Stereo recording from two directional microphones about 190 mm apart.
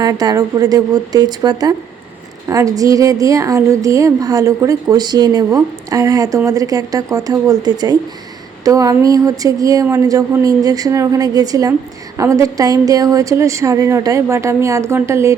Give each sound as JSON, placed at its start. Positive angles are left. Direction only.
{"t": 0.0, "sound": "a woman's voice", "side_deg": -20}